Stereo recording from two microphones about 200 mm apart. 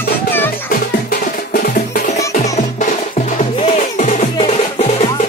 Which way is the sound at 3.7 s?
35° left (ahead or behind).